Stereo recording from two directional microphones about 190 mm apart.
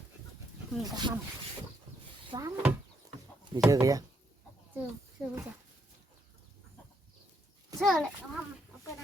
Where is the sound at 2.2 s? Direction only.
20° right (ahead or behind).